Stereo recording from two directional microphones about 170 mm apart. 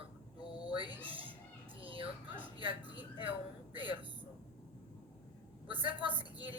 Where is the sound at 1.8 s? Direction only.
30° right (ahead or behind).